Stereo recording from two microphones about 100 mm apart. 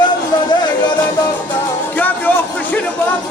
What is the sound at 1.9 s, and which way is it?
Music, 15° left (ahead or behind).